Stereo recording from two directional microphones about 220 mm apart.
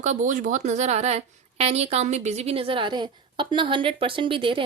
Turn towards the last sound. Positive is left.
turn(degrees=-25)  # may be behind; listen again after turning